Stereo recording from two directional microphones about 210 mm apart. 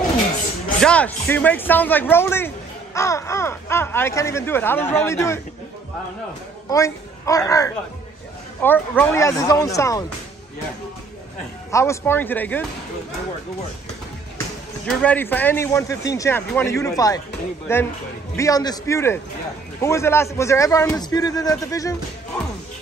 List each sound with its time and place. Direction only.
0.7 s speech: 5° left (ahead or behind)
6.7 s speech: 15° left (ahead or behind)
11.7 s speech: 15° left (ahead or behind)
14.9 s speech: 5° left (ahead or behind)